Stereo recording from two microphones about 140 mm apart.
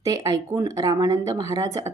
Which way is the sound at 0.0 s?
25° right (ahead or behind).